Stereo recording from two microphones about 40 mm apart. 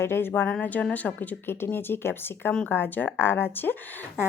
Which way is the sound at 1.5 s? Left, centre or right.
Left.